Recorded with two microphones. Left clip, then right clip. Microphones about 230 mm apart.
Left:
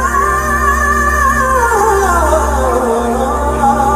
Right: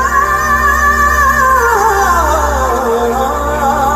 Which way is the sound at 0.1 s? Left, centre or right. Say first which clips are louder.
Right 2 dB; right.